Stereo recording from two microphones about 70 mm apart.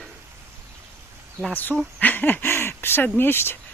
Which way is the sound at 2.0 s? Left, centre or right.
Left.